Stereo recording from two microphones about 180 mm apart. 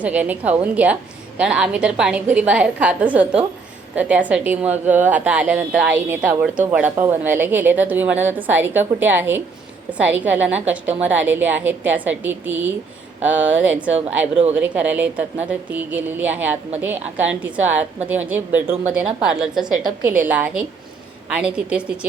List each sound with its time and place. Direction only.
0.0 s a woman's voice: 10° right (ahead or behind)
13.9 s a woman's voice: 35° right (ahead or behind)
14.5 s a woman's voice: 10° right (ahead or behind)